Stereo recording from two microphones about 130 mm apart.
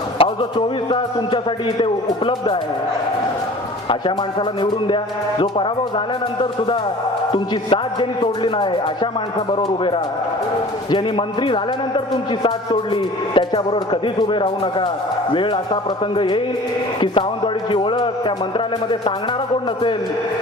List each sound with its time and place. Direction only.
0.2 s a man's voice: 40° left (ahead or behind)
3.8 s a man's voice: 40° left (ahead or behind)
7.3 s a man's voice: 40° left (ahead or behind)
10.9 s a man's voice: 40° left (ahead or behind)